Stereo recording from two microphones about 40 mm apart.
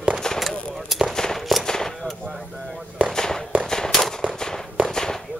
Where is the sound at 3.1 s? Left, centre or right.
Centre.